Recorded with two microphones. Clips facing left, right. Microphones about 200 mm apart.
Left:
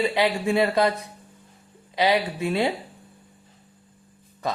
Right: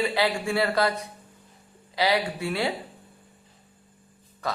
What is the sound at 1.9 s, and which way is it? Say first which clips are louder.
Speech: left 2 dB; 20° left (ahead or behind).